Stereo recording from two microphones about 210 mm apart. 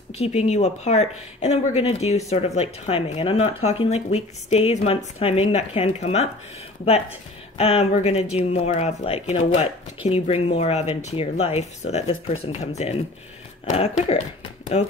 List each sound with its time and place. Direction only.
0.1 s speech: 30° left (ahead or behind)